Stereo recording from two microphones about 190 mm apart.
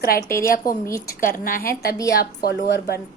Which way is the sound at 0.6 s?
15° left (ahead or behind).